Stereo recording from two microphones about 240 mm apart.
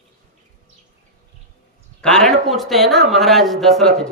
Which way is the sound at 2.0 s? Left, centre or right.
Centre.